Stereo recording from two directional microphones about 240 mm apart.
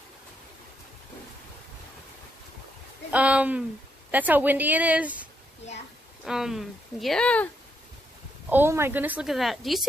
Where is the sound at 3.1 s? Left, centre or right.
Centre.